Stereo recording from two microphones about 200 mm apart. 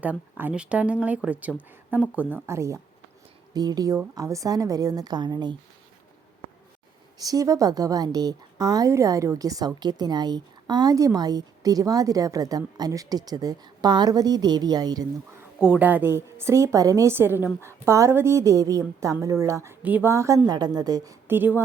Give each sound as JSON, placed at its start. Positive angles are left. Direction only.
{"t": 0.0, "sound": "a woman's voice", "side_deg": -10}
{"t": 7.2, "sound": "a woman's voice", "side_deg": -15}
{"t": 15.5, "sound": "a woman's voice", "side_deg": -5}